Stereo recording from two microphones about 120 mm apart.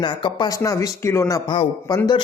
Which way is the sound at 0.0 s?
40° left (ahead or behind).